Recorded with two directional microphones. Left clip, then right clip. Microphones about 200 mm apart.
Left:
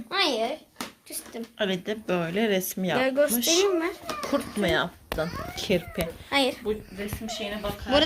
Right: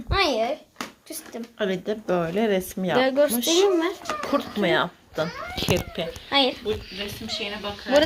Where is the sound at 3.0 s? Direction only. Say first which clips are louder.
Right 3 dB; 20° right (ahead or behind).